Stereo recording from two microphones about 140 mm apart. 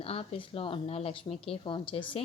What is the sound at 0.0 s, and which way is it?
A woman's voice, 45° left (ahead or behind).